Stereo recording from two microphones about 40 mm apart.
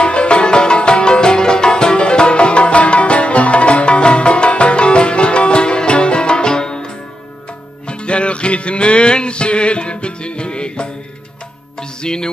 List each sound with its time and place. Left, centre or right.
0.0 s music: left